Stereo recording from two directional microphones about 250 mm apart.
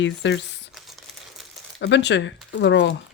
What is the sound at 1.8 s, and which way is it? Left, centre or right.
Speech, left.